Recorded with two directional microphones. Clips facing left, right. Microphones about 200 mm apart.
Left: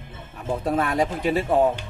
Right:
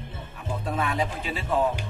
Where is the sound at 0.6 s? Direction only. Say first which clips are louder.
Left 5 dB; 45° left (ahead or behind).